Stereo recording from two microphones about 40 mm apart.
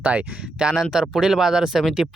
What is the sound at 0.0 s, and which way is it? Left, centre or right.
Speech, right.